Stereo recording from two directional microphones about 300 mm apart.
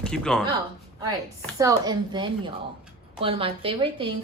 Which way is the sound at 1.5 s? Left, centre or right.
Centre.